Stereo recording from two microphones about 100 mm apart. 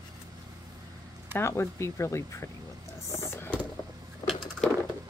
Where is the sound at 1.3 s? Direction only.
25° left (ahead or behind).